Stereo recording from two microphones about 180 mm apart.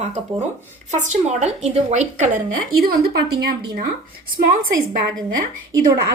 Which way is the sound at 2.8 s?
60° right (ahead or behind).